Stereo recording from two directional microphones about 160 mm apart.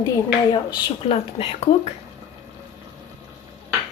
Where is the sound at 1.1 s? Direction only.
40° left (ahead or behind).